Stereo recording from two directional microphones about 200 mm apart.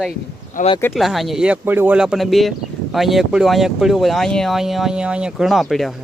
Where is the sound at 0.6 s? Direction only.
40° left (ahead or behind).